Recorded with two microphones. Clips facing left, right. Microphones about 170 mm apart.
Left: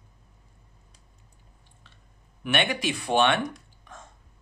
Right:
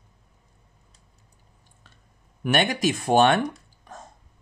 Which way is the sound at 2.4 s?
40° right (ahead or behind).